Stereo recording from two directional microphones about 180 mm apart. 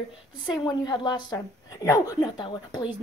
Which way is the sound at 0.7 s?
25° left (ahead or behind).